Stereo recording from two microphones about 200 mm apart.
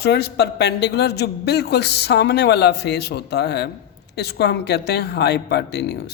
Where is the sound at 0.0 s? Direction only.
55° left (ahead or behind).